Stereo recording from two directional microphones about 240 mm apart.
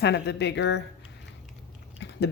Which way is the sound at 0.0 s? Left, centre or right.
Left.